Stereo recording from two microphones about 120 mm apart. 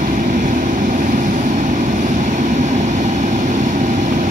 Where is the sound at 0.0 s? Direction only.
90° right.